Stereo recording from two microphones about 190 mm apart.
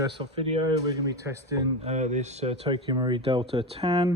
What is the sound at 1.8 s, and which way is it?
Speech, 35° right (ahead or behind).